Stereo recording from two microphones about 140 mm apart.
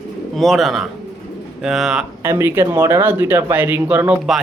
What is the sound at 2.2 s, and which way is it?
A man's voice, 20° right (ahead or behind).